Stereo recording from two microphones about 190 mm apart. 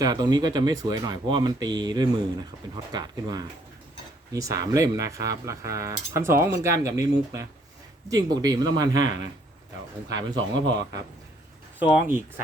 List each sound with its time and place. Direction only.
0.0 s speech: 20° right (ahead or behind)
10.3 s speech: 75° right (ahead or behind)
11.8 s speech: 10° right (ahead or behind)